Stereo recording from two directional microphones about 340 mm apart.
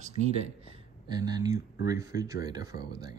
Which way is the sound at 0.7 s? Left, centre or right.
Centre.